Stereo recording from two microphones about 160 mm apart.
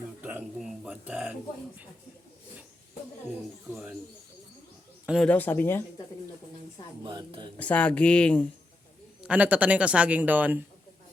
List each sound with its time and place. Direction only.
0.2 s a sound: 10° right (ahead or behind)
3.7 s bird: 5° right (ahead or behind)
5.0 s speech: centre (ahead or behind)
7.0 s a sound: 30° right (ahead or behind)
7.6 s speech: 10° left (ahead or behind)
9.2 s a man's voice: 10° right (ahead or behind)